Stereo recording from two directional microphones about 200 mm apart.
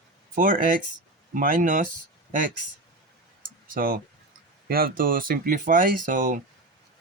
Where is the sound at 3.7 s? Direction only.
45° right (ahead or behind).